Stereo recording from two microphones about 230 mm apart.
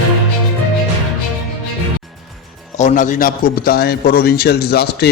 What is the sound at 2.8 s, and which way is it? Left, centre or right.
A man's voice, left.